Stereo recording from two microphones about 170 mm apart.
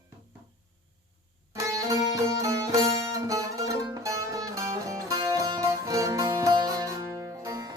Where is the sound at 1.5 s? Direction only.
20° right (ahead or behind).